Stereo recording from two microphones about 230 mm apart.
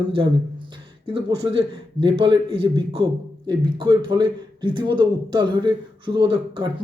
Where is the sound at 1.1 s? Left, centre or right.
Right.